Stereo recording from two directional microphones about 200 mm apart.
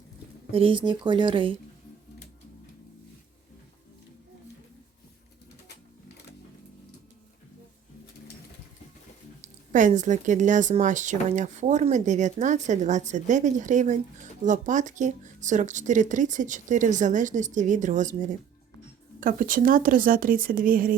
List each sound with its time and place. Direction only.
0.5 s speech: 25° right (ahead or behind)
9.7 s a woman's voice: 40° right (ahead or behind)